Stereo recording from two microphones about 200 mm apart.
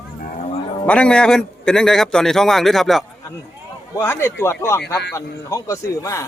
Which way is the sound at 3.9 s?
15° left (ahead or behind).